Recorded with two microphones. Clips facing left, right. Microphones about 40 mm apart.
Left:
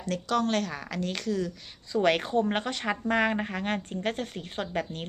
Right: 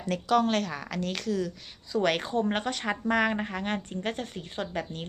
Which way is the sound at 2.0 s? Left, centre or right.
Centre.